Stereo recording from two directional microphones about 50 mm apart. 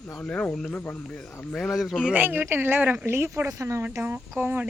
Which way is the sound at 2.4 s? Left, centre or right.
Right.